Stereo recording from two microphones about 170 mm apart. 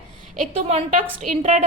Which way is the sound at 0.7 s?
35° right (ahead or behind).